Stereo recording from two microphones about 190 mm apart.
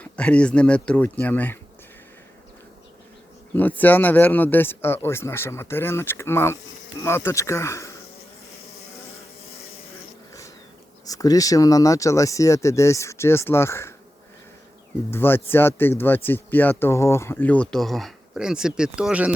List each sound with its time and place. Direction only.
0.0 s a man's voice: 5° left (ahead or behind)
3.5 s a man's voice: 10° left (ahead or behind)
11.0 s a man's voice: 20° left (ahead or behind)
15.1 s a man's voice: 10° left (ahead or behind); by 19.3 s 5° right (ahead or behind)